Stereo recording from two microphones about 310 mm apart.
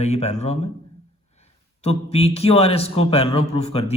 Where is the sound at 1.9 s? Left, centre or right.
Centre.